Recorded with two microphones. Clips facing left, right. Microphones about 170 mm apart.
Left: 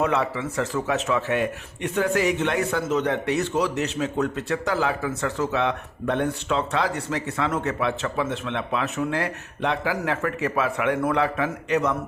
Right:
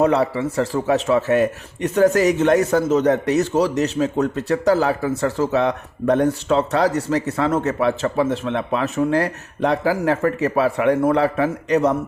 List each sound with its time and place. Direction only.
0.0 s a man's voice: 35° right (ahead or behind)